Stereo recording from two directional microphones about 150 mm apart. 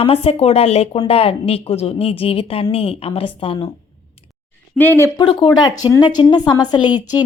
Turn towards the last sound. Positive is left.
turn(degrees=30)  # may be behind; listen again after turning